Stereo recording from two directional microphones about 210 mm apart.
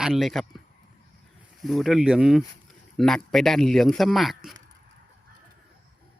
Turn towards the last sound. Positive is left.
turn(degrees=0)  # may be behind; listen again after turning